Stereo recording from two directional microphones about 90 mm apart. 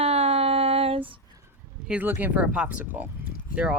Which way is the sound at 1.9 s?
20° right (ahead or behind).